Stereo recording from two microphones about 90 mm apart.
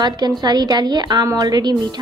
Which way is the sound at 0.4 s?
50° right (ahead or behind).